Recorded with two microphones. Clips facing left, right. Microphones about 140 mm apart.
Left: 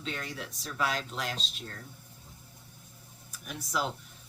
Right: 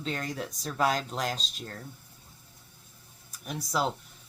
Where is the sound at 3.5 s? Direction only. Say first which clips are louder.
Right 4 dB; 35° right (ahead or behind).